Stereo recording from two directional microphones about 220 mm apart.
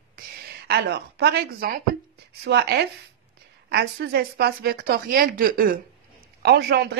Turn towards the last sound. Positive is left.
turn(degrees=-45)  # may be behind; listen again after turning